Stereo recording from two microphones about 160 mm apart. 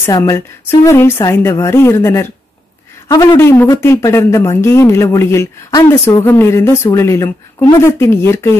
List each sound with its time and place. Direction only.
0.0 s a woman's voice: 15° left (ahead or behind)